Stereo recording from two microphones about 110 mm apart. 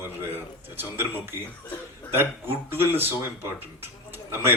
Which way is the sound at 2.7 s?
20° right (ahead or behind).